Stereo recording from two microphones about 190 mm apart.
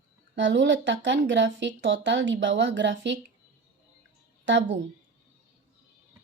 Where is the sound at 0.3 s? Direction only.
70° right (ahead or behind).